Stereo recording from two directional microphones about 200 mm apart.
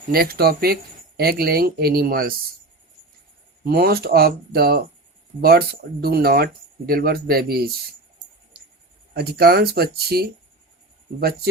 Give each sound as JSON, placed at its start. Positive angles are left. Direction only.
{"t": 0.1, "sound": "speech", "side_deg": -50}
{"t": 3.6, "sound": "speech", "side_deg": -50}
{"t": 9.1, "sound": "speech", "side_deg": -50}